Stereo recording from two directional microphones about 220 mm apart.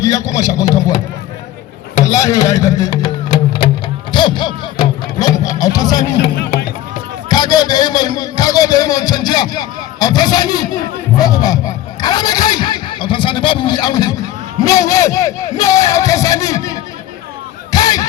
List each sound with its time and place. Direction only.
0.0 s a man's voice: 15° left (ahead or behind)
2.0 s speech: 15° left (ahead or behind)
7.3 s a man's voice: 20° left (ahead or behind)
17.7 s a sound: 15° left (ahead or behind)